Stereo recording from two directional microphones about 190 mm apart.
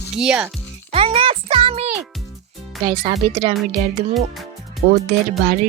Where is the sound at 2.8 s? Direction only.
30° right (ahead or behind).